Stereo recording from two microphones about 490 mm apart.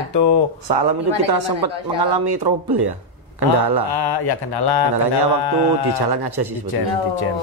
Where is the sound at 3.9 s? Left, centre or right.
Left.